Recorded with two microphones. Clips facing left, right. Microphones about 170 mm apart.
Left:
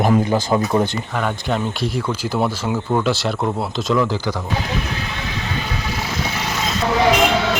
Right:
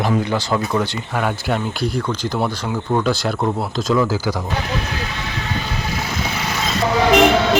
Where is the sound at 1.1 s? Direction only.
5° right (ahead or behind).